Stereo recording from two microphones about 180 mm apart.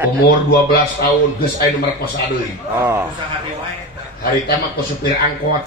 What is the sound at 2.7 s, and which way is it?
Speech, 15° right (ahead or behind).